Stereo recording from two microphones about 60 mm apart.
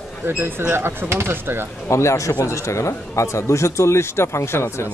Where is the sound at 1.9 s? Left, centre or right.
Left.